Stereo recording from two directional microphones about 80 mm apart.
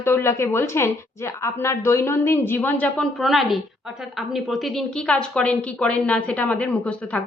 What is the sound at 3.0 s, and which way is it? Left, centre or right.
A woman's voice, centre.